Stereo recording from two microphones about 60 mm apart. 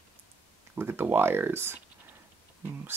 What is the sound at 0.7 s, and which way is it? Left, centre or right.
Speech, right.